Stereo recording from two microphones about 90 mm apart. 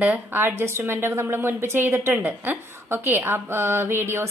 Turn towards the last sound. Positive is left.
turn(degrees=-25)  # may be behind; listen again after turning